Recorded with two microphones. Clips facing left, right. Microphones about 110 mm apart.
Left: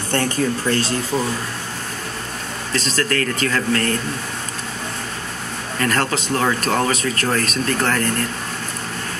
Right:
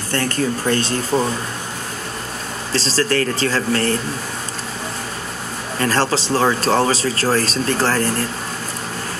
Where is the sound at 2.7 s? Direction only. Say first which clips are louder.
Right 3 dB; 30° right (ahead or behind).